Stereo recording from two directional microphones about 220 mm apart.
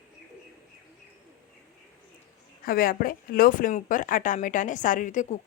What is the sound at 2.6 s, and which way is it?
Speech, 40° left (ahead or behind).